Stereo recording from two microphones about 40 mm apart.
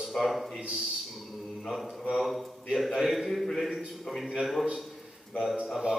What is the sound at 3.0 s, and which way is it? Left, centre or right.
A man's voice, centre.